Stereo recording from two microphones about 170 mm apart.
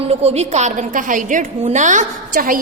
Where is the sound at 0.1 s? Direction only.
40° right (ahead or behind).